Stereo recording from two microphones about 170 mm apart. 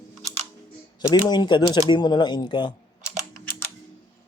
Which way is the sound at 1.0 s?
25° left (ahead or behind).